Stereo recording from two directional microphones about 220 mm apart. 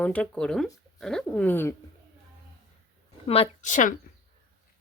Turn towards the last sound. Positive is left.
turn(degrees=35)  # may be behind; listen again after turning